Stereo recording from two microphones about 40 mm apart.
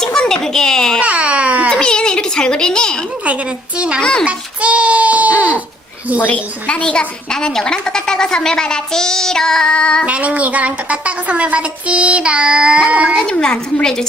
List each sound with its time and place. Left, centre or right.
0.0 s a sound: centre
0.4 s speech: centre
1.0 s baby cry: right
1.7 s a sound: centre
3.2 s a woman's voice: right
4.0 s a woman's voice: left
4.3 s baby cry: right
6.3 s a woman's voice: left
7.3 s speech: centre
10.1 s child singing: right
13.8 s speech: centre